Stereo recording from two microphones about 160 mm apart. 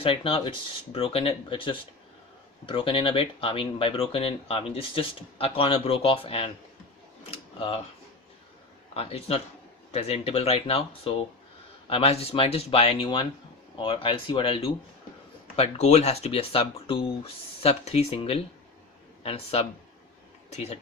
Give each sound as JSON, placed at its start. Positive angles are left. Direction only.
{"t": 0.0, "sound": "speech", "side_deg": 35}
{"t": 7.3, "sound": "a sound", "side_deg": 40}
{"t": 9.0, "sound": "speech", "side_deg": 40}